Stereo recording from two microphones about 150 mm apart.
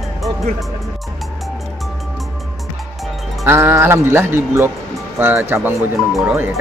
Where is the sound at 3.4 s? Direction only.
15° right (ahead or behind).